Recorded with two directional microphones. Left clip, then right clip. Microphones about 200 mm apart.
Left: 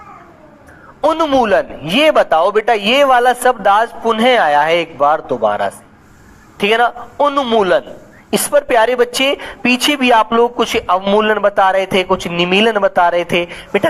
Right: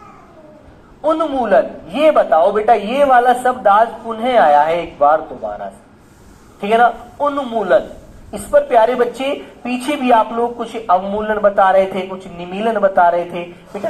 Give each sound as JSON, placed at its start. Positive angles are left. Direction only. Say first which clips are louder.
{"t": 1.0, "sound": "a man's voice", "louder": "left 4 dB", "side_deg": 25}